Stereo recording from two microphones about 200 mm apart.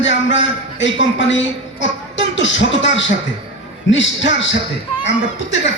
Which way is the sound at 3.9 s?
65° left (ahead or behind).